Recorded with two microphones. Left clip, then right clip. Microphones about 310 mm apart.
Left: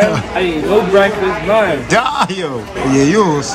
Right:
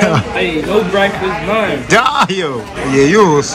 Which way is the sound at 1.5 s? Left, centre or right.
Centre.